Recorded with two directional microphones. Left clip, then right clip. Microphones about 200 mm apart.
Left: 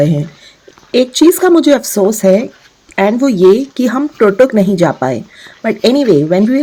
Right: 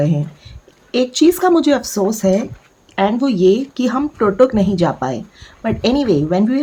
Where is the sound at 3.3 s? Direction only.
Centre (ahead or behind).